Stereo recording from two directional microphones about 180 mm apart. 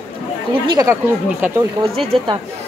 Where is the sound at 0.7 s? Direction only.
20° right (ahead or behind).